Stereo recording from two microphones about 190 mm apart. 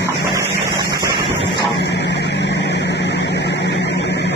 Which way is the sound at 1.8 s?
65° left (ahead or behind).